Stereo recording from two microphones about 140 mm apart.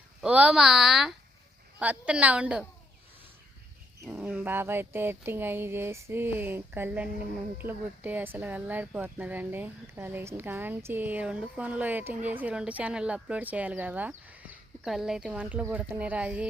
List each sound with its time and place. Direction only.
0.2 s speech: 10° right (ahead or behind)
4.0 s speech: 5° right (ahead or behind)